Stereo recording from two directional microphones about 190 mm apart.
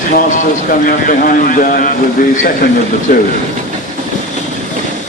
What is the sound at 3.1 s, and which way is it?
Speech, 45° left (ahead or behind).